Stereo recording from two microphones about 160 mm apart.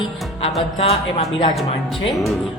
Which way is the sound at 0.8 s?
40° left (ahead or behind).